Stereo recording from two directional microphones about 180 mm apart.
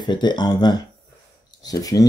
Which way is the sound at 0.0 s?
25° left (ahead or behind).